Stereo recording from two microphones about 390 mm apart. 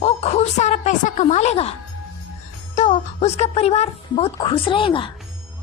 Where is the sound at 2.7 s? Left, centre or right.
Centre.